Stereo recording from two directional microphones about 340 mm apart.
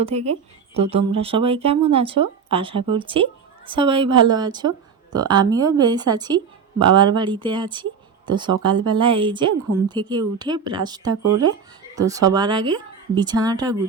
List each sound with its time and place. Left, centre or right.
0.0 s a woman's voice: centre